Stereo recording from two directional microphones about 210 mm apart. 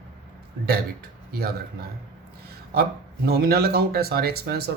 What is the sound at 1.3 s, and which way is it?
Speech, 45° right (ahead or behind).